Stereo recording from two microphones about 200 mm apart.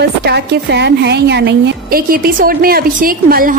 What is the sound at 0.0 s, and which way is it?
A woman's voice, 55° right (ahead or behind).